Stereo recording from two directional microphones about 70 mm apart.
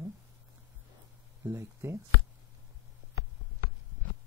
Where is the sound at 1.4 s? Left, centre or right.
Right.